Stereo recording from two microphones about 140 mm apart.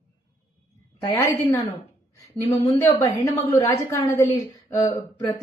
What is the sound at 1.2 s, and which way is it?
A woman's voice, 20° left (ahead or behind).